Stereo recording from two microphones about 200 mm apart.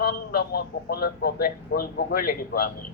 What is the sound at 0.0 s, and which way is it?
Speech, 50° left (ahead or behind).